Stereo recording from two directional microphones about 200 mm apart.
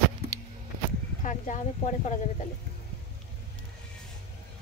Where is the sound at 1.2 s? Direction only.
40° left (ahead or behind).